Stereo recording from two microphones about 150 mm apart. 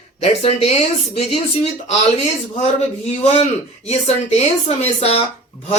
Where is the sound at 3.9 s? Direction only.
45° left (ahead or behind).